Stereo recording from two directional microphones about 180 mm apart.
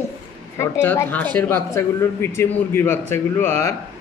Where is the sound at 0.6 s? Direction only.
15° left (ahead or behind).